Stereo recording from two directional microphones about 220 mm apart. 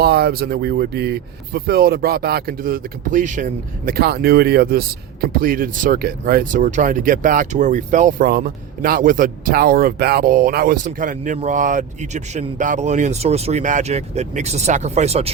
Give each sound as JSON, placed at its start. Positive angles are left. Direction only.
{"t": 0.0, "sound": "speech", "side_deg": -45}